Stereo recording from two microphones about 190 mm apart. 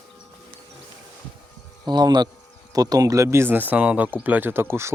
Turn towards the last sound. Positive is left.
turn(degrees=-10)  # may be behind; listen again after turning